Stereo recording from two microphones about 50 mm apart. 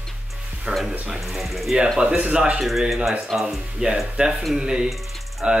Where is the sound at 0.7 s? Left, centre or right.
Right.